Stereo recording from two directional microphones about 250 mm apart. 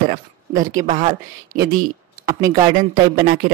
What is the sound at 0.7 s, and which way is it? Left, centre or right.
Speech, right.